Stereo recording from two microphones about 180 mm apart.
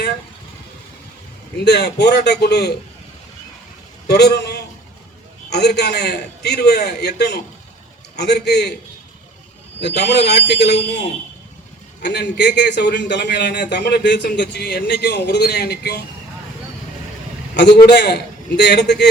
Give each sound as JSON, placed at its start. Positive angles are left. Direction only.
{"t": 1.5, "sound": "a man's voice", "side_deg": 65}
{"t": 4.1, "sound": "a man's voice", "side_deg": 65}
{"t": 9.8, "sound": "a man's voice", "side_deg": 70}
{"t": 17.5, "sound": "a man's voice", "side_deg": 70}